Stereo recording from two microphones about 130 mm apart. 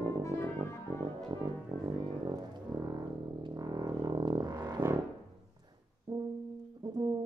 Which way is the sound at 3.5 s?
30° right (ahead or behind).